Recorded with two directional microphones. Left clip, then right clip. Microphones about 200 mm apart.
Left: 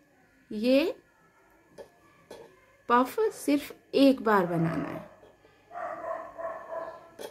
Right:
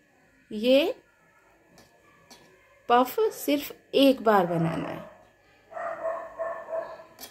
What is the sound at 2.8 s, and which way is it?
A woman's voice, 5° left (ahead or behind).